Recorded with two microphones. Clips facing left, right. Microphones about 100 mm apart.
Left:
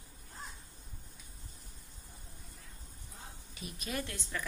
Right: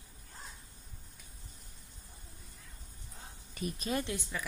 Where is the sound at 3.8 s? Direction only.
25° right (ahead or behind).